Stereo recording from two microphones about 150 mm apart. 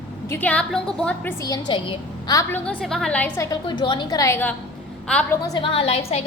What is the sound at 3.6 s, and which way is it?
Speech, 30° left (ahead or behind).